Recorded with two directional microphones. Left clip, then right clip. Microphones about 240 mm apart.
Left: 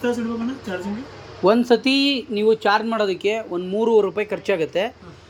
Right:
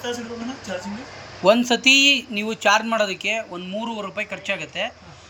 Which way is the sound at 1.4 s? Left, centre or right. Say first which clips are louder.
Right 1 dB; centre.